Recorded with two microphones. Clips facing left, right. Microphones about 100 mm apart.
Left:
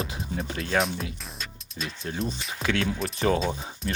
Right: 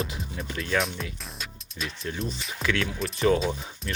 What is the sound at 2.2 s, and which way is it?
Speech, centre (ahead or behind).